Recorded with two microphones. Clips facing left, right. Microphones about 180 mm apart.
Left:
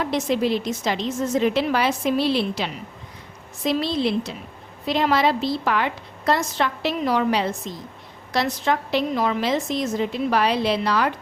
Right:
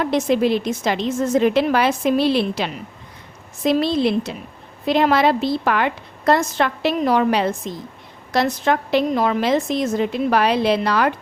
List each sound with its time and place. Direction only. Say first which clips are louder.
0.0 s a woman's voice: right 4 dB; 55° right (ahead or behind)